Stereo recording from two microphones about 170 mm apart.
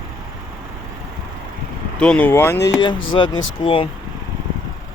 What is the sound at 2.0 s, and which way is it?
Speech, 10° left (ahead or behind).